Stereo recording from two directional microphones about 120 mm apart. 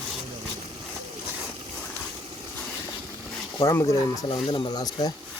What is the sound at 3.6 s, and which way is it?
Speech, 25° left (ahead or behind).